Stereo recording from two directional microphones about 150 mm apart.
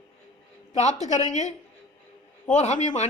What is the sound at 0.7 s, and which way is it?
A woman's voice, 50° left (ahead or behind).